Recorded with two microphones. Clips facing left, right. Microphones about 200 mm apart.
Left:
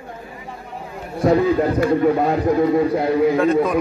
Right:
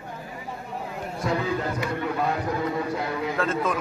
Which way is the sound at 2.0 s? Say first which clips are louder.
Left 10 dB; 50° left (ahead or behind).